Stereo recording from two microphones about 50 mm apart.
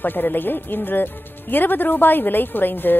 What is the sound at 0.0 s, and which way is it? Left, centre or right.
Speech, left.